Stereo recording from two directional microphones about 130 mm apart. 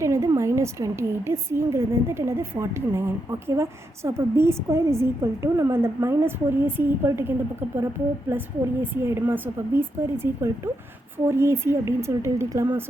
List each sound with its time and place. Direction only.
0.0 s a woman's voice: 20° right (ahead or behind)